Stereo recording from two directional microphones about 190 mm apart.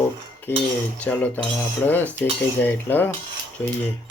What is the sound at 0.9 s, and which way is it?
Speech, 10° left (ahead or behind).